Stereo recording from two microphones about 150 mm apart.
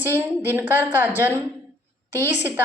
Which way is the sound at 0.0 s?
15° right (ahead or behind).